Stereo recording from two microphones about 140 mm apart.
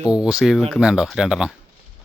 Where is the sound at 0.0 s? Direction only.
5° right (ahead or behind).